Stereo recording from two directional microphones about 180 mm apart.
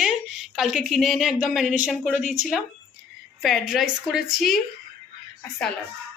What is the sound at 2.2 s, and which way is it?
Speech, 40° left (ahead or behind).